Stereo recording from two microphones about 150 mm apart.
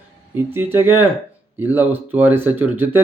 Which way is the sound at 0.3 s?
15° right (ahead or behind).